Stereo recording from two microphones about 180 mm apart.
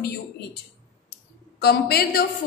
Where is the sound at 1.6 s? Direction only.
60° left (ahead or behind).